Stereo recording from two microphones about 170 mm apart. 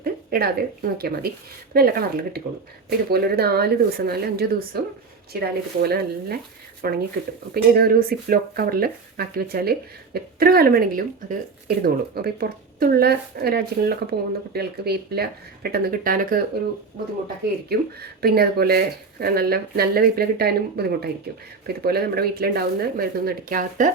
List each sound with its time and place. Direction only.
0.0 s speech: 65° right (ahead or behind)
18.2 s speech: 65° right (ahead or behind)